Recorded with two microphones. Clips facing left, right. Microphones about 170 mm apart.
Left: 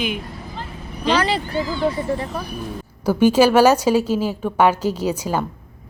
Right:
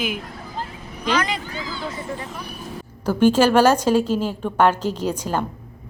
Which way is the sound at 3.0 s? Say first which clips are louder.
Left 2 dB; 10° left (ahead or behind).